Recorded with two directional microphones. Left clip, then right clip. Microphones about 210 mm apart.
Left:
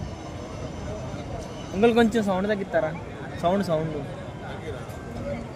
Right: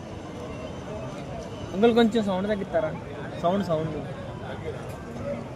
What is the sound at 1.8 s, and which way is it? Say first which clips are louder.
Speech: left 1 dB; 35° left (ahead or behind).